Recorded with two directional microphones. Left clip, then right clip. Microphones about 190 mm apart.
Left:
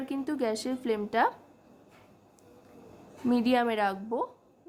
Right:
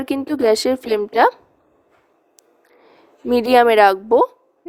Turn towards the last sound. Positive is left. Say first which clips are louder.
# right 17 dB
turn(degrees=-50)  # may be behind; listen again after turning